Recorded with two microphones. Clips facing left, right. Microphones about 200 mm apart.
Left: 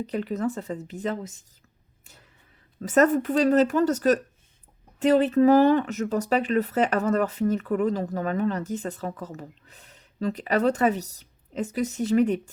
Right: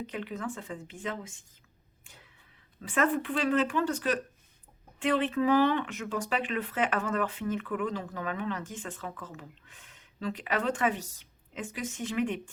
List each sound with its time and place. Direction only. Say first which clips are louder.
0.0 s speech: left 9 dB; 40° left (ahead or behind)
2.8 s speech: left 8 dB; 40° left (ahead or behind)